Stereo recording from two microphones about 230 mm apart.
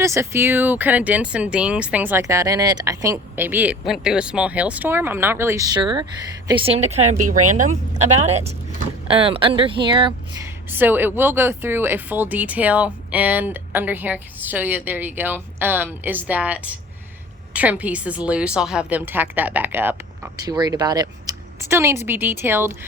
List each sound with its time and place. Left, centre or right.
0.0 s speech: centre
10.7 s speech: centre